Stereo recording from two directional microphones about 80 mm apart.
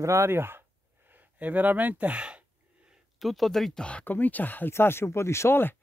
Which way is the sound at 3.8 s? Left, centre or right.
Centre.